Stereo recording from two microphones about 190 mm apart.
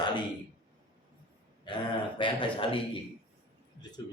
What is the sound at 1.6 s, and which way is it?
A man's voice, 25° left (ahead or behind).